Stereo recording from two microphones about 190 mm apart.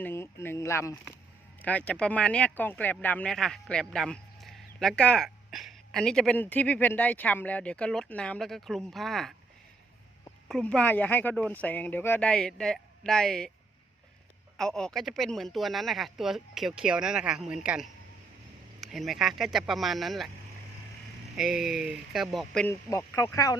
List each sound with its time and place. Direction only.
0.0 s speech: 15° left (ahead or behind)
10.5 s speech: 5° left (ahead or behind)
14.5 s speech: centre (ahead or behind)
21.3 s speech: centre (ahead or behind)
22.9 s speech: 15° left (ahead or behind)